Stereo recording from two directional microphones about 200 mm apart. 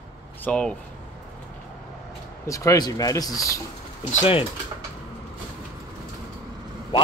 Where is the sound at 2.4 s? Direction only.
15° left (ahead or behind).